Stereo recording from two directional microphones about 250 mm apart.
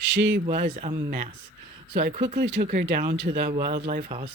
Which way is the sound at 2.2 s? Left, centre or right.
Right.